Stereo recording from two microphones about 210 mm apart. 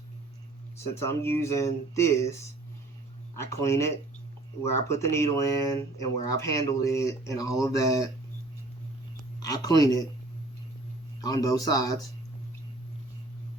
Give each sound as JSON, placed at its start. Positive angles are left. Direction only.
{"t": 0.9, "sound": "speech", "side_deg": 10}
{"t": 3.3, "sound": "speech", "side_deg": 15}
{"t": 9.4, "sound": "speech", "side_deg": 15}
{"t": 11.2, "sound": "speech", "side_deg": 15}